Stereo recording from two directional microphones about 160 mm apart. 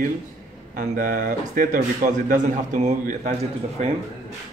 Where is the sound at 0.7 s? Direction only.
55° right (ahead or behind).